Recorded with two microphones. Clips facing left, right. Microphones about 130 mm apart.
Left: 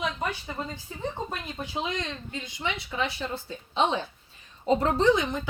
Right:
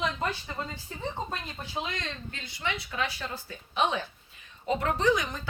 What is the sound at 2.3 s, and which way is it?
A woman's voice, 20° left (ahead or behind).